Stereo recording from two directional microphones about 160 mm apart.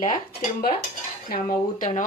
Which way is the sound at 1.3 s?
60° left (ahead or behind).